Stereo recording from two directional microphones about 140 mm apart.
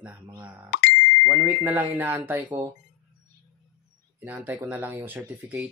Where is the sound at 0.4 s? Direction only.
10° right (ahead or behind).